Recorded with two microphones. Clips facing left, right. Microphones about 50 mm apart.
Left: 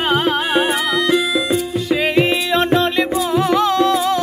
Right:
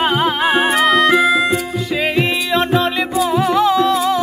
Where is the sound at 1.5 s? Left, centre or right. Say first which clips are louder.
Left 1 dB; centre.